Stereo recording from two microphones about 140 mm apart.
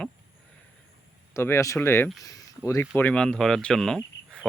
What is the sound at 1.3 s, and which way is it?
Speech, 20° left (ahead or behind).